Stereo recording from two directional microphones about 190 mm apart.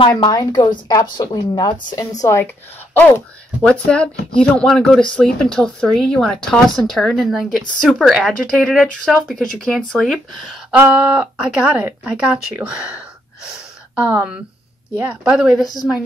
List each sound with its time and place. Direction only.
0.0 s speech: 25° left (ahead or behind)
3.6 s speech: 5° left (ahead or behind)
15.6 s speech: 20° left (ahead or behind)